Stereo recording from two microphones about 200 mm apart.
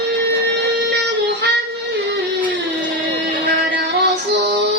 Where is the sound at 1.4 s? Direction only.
55° right (ahead or behind).